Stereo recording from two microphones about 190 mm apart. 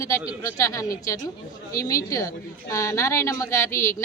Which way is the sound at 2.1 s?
15° left (ahead or behind).